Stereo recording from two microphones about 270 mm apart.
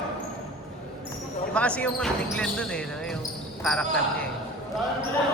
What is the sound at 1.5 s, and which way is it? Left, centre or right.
Speech, centre.